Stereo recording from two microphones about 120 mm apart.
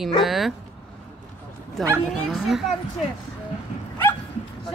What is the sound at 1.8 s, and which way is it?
Speech, centre (ahead or behind).